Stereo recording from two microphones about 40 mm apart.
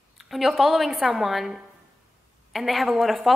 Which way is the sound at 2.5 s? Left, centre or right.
Centre.